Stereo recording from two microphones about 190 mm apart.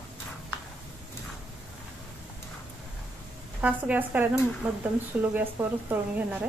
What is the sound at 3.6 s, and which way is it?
A woman's voice, 10° right (ahead or behind).